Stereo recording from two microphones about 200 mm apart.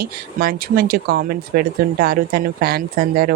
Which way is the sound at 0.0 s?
50° right (ahead or behind).